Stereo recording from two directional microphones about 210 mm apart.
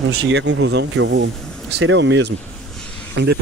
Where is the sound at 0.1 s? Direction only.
75° right (ahead or behind).